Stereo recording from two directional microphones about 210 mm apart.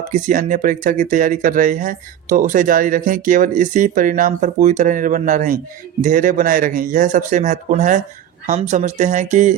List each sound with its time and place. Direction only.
0.1 s speech: 35° right (ahead or behind)